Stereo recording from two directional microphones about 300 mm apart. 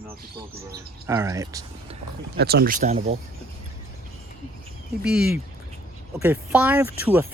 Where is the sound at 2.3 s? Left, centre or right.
Right.